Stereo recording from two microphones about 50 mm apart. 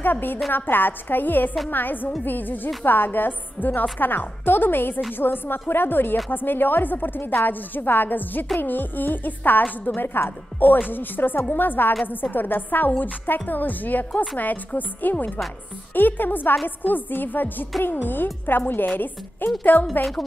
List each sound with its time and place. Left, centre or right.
0.0 s a woman's voice: left
19.6 s a woman's voice: left